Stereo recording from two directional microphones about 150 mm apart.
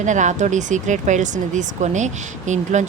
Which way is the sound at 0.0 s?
55° right (ahead or behind).